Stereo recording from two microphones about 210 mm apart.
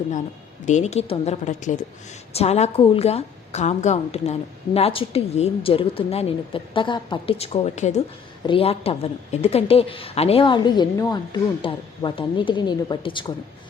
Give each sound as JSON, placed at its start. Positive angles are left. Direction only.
{"t": 0.6, "sound": "a woman's voice", "side_deg": 35}